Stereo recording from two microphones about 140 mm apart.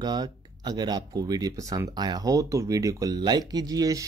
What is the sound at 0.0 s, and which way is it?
Speech, 30° right (ahead or behind).